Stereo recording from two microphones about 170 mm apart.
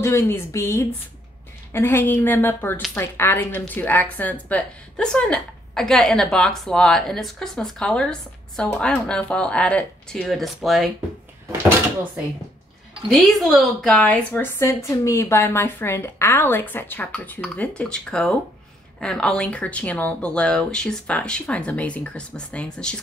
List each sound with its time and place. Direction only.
0.0 s a woman's voice: 15° left (ahead or behind); by 10.9 s centre (ahead or behind)
13.1 s a woman's voice: centre (ahead or behind)